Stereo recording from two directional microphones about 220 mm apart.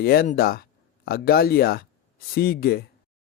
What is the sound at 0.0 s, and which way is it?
Speech, 45° left (ahead or behind).